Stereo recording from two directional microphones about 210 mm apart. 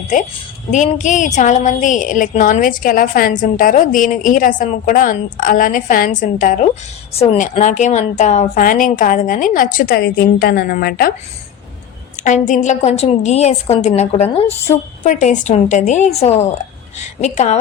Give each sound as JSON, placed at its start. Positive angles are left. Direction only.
{"t": 0.7, "sound": "a woman's voice", "side_deg": 35}
{"t": 7.1, "sound": "a woman's voice", "side_deg": 30}
{"t": 12.1, "sound": "a woman's voice", "side_deg": 35}